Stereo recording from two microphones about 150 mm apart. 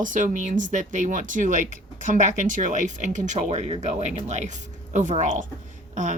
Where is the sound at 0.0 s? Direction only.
60° right (ahead or behind).